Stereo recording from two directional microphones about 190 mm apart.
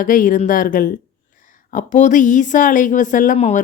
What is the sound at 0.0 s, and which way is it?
Speech, 45° left (ahead or behind).